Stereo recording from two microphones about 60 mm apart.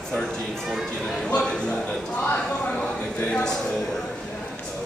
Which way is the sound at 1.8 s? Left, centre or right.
Left.